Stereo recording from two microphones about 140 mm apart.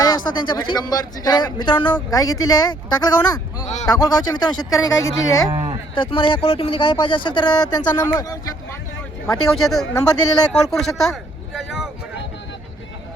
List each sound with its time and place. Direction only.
0.0 s speech: 30° left (ahead or behind)
5.9 s speech: 40° left (ahead or behind)
8.0 s speech: 20° left (ahead or behind)
9.6 s speech: centre (ahead or behind)